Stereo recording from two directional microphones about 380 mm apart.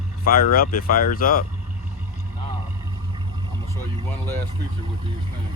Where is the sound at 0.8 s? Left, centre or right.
Left.